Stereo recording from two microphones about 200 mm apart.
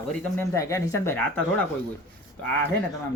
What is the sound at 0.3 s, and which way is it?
Speech, 15° left (ahead or behind).